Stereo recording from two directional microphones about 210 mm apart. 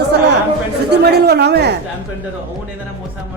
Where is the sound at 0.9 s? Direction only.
50° right (ahead or behind).